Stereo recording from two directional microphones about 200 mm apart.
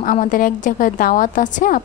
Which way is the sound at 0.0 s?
40° left (ahead or behind).